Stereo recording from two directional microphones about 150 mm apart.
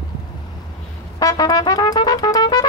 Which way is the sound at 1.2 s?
25° left (ahead or behind).